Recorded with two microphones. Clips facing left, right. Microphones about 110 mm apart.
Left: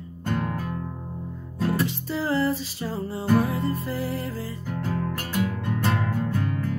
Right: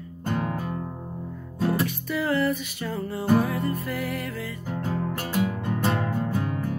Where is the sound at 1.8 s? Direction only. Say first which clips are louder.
Even; 30° left (ahead or behind).